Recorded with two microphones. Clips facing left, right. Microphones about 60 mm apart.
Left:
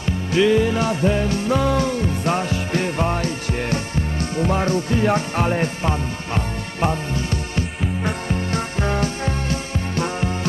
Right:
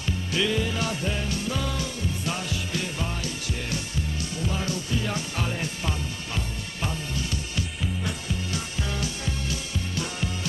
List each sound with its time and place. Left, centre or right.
0.0 s music: left
1.0 s music: left